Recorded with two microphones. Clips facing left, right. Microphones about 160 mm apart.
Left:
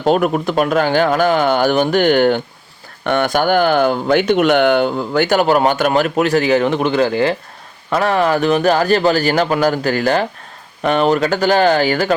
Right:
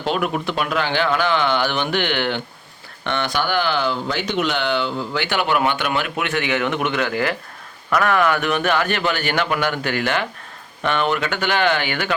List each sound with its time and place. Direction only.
0.0 s speech: 45° left (ahead or behind)